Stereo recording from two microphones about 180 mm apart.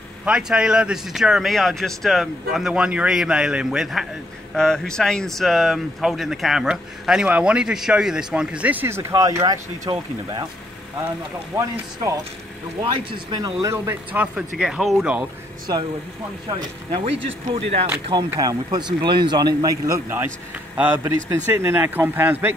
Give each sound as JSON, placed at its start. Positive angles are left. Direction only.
{"t": 0.2, "sound": "speech", "side_deg": -5}
{"t": 12.8, "sound": "a man's voice", "side_deg": -25}
{"t": 16.4, "sound": "a man's voice", "side_deg": -25}
{"t": 17.1, "sound": "speech", "side_deg": -90}
{"t": 17.6, "sound": "speech", "side_deg": -35}
{"t": 18.3, "sound": "a man's voice", "side_deg": -20}